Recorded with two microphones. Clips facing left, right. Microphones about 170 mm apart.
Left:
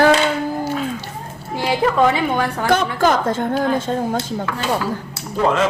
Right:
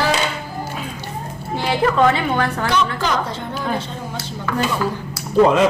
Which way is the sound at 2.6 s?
50° left (ahead or behind).